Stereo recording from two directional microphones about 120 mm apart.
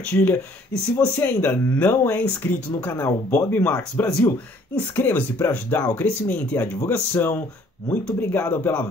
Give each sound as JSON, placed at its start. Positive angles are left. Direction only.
{"t": 0.9, "sound": "speech", "side_deg": 15}